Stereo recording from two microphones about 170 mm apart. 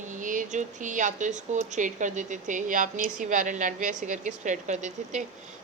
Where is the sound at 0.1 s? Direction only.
50° right (ahead or behind).